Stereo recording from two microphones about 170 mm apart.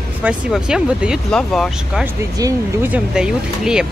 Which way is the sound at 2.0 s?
20° right (ahead or behind).